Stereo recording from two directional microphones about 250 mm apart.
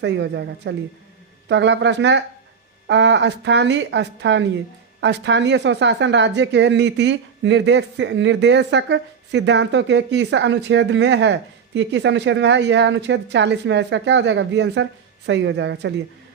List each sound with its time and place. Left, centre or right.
0.0 s speech: right